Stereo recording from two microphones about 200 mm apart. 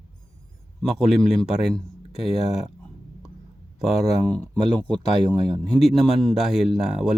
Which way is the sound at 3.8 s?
Centre (ahead or behind).